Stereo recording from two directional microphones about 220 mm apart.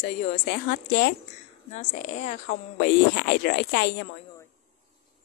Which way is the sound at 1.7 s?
35° left (ahead or behind).